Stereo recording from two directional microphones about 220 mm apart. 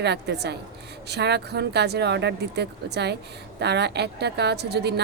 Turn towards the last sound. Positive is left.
turn(degrees=-50)  # may be behind; listen again after turning